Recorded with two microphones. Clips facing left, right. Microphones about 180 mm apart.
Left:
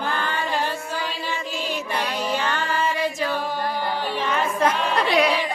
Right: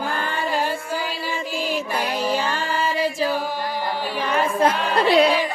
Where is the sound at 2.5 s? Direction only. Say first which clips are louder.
Right 1 dB; 30° right (ahead or behind).